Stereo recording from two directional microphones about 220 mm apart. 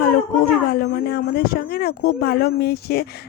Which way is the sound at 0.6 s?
45° left (ahead or behind).